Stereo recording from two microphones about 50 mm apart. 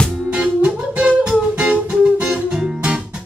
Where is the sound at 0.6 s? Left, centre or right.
Centre.